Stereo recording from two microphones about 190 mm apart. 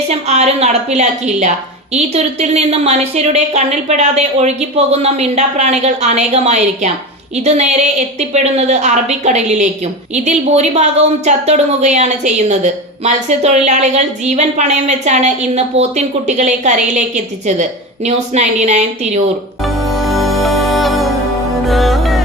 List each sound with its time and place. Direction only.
0.1 s a woman's voice: 35° right (ahead or behind)
19.6 s music: centre (ahead or behind)